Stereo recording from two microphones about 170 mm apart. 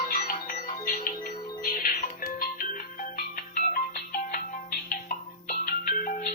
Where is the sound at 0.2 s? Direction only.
50° left (ahead or behind).